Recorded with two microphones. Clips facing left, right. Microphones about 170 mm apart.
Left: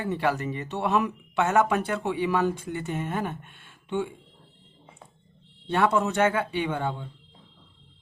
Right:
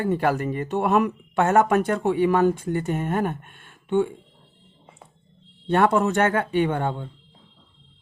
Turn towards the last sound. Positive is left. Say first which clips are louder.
# right 6 dB
turn(degrees=-50)  # may be behind; listen again after turning